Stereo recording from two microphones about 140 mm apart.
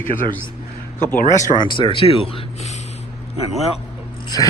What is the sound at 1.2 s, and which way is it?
Speech, 60° left (ahead or behind).